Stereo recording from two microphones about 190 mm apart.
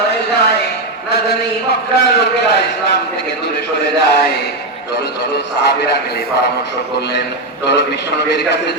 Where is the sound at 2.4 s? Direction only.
65° left (ahead or behind).